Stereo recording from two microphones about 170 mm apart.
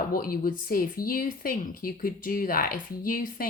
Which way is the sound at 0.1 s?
60° left (ahead or behind).